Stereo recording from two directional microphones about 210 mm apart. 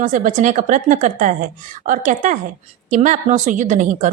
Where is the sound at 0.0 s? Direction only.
40° right (ahead or behind).